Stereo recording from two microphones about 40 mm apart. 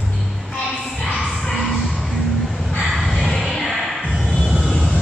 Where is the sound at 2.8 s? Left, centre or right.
Centre.